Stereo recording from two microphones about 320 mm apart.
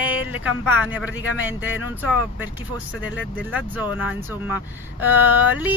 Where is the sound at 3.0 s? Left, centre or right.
Centre.